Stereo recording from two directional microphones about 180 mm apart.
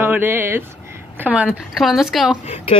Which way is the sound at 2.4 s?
35° left (ahead or behind).